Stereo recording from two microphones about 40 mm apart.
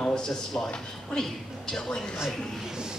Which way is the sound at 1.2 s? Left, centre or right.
Centre.